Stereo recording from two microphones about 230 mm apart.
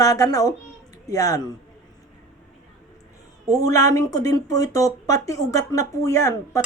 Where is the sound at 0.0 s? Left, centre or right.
Centre.